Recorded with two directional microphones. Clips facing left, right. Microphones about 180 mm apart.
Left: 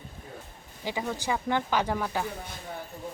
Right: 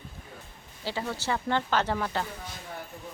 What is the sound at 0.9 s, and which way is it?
A woman's voice, 15° left (ahead or behind).